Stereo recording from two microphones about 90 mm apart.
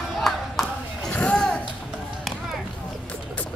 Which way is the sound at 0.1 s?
5° left (ahead or behind).